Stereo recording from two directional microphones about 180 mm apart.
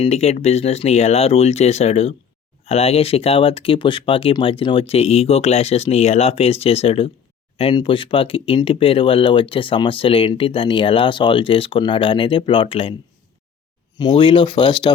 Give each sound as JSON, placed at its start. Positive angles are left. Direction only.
{"t": 0.0, "sound": "speech", "side_deg": 35}
{"t": 14.0, "sound": "speech", "side_deg": 25}